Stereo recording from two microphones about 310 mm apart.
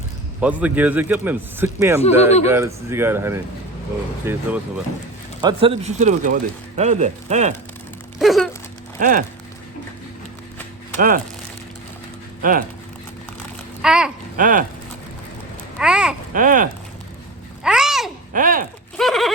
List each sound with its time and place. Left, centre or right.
0.4 s speech: centre
2.0 s speech: left
2.5 s speech: centre
8.2 s a sound: centre
9.0 s speech: right
12.4 s speech: right
13.8 s speech: centre
14.3 s speech: right
15.8 s a sound: centre
16.3 s speech: right
17.6 s babbling: centre
18.3 s speech: right
18.9 s a sound: centre